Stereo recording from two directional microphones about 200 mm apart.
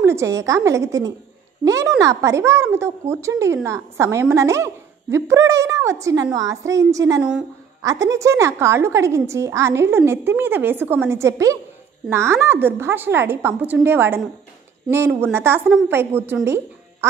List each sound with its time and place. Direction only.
0.0 s speech: 15° right (ahead or behind)
7.2 s a woman's voice: 5° right (ahead or behind)
7.8 s speech: 15° right (ahead or behind)
16.4 s music: 15° right (ahead or behind)